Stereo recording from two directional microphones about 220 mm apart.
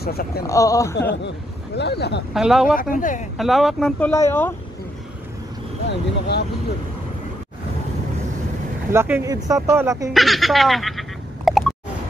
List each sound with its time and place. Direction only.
0.0 s speech: 45° left (ahead or behind)
0.5 s speech: 15° left (ahead or behind)
1.8 s speech: 50° left (ahead or behind)
2.3 s speech: centre (ahead or behind)
2.8 s speech: 35° left (ahead or behind)
3.3 s speech: centre (ahead or behind)
5.9 s speech: 50° left (ahead or behind)
8.9 s speech: 10° right (ahead or behind)
10.1 s a sound: centre (ahead or behind)